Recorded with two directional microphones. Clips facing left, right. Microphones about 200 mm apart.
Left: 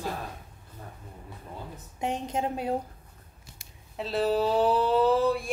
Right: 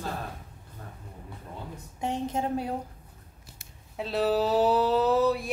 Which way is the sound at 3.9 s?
Centre (ahead or behind).